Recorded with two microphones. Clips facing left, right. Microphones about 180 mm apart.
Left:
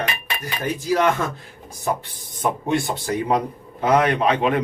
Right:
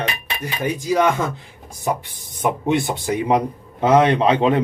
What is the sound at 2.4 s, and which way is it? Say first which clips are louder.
A man's voice: right 2 dB; 20° right (ahead or behind).